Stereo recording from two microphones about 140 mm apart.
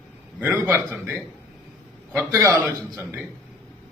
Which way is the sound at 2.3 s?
20° right (ahead or behind).